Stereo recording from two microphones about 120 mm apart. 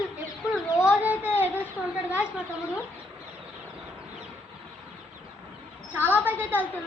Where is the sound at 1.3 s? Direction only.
15° left (ahead or behind).